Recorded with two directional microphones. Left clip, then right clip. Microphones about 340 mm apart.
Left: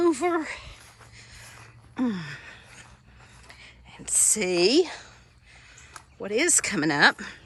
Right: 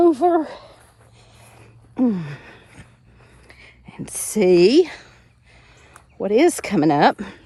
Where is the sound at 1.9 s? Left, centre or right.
Centre.